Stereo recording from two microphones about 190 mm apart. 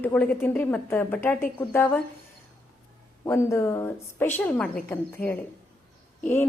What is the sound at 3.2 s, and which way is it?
A woman's voice, 15° left (ahead or behind).